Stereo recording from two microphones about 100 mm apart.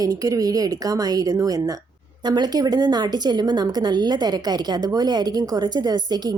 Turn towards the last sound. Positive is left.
turn(degrees=-45)  # may be behind; listen again after turning